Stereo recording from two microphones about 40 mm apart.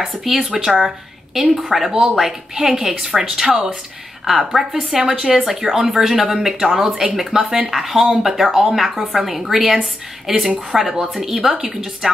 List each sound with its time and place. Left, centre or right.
0.0 s a woman's voice: centre
5.2 s a woman's voice: centre
8.7 s a woman's voice: centre